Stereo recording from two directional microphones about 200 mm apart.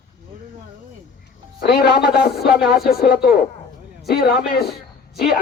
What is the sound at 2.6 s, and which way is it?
Speech, centre (ahead or behind).